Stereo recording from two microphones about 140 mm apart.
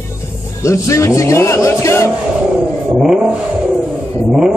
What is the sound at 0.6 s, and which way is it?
A man's voice, 20° left (ahead or behind).